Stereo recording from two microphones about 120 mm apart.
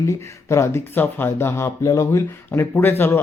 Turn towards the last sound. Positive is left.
turn(degrees=20)  # may be behind; listen again after turning